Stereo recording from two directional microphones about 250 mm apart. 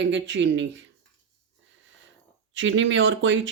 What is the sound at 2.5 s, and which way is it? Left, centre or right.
Speech, right.